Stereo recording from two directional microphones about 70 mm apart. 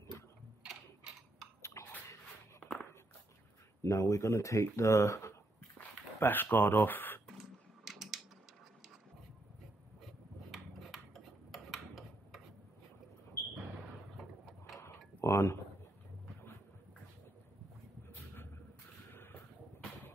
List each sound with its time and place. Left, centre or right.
1.6 s a sound: left
2.6 s walk: centre
3.8 s speech: left
6.2 s speech: left
7.2 s typing: centre
10.5 s a sound: centre
15.2 s tick-tock: left
18.1 s vehicle: left